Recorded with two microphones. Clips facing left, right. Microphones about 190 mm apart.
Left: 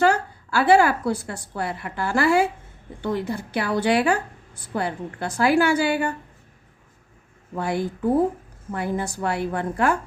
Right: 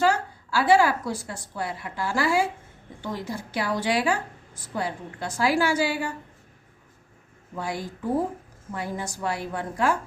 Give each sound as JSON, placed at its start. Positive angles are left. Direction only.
{"t": 0.0, "sound": "a woman's voice", "side_deg": 60}
{"t": 7.5, "sound": "a woman's voice", "side_deg": 60}